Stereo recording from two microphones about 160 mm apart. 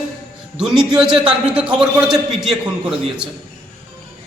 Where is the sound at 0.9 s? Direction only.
5° right (ahead or behind).